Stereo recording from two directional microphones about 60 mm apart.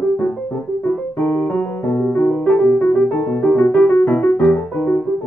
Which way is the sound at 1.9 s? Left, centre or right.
Left.